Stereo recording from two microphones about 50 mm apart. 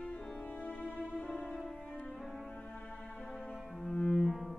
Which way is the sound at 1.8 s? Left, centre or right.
Left.